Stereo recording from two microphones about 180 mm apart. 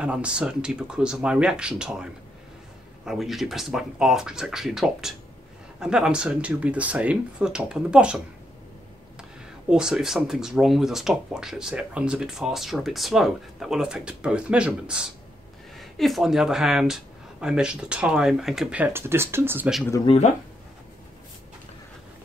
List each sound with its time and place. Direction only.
0.0 s speech: 5° right (ahead or behind)
3.1 s speech: centre (ahead or behind)
9.7 s speech: 5° right (ahead or behind)
20.1 s speech: 30° left (ahead or behind)